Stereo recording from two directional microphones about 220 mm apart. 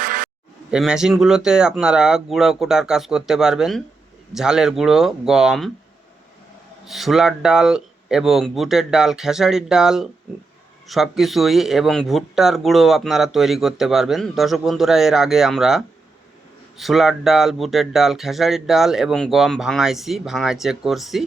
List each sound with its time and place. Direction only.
0.0 s a sound: 40° right (ahead or behind)
0.7 s speech: 5° right (ahead or behind)
6.8 s speech: centre (ahead or behind)